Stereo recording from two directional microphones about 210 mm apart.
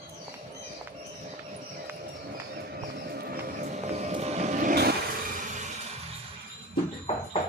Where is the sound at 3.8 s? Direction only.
35° right (ahead or behind).